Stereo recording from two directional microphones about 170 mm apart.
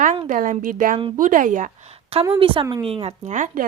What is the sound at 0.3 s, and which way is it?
A woman's voice, 50° right (ahead or behind).